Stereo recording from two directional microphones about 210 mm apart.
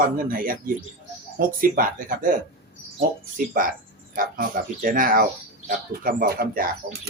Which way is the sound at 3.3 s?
40° right (ahead or behind).